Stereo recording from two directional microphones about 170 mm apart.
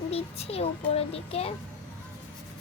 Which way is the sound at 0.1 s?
35° left (ahead or behind).